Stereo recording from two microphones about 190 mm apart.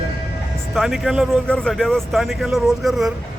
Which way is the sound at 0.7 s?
Centre (ahead or behind).